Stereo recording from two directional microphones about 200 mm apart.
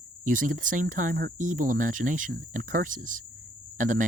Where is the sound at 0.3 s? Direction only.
40° right (ahead or behind).